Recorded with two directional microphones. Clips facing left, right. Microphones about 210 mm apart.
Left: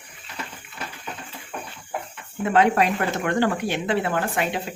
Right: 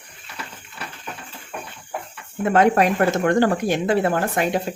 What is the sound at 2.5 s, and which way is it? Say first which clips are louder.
Speech: right 3 dB; 45° right (ahead or behind).